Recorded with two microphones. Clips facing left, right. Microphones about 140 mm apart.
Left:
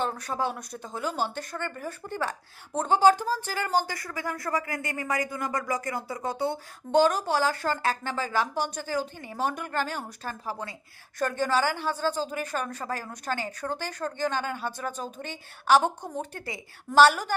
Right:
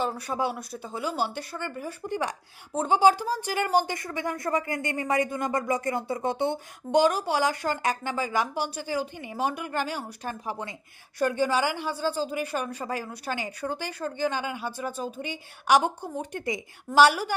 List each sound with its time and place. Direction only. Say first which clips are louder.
0.0 s a woman's voice: right 1 dB; 10° right (ahead or behind)